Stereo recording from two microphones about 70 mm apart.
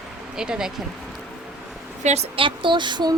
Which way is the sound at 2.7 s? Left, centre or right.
Right.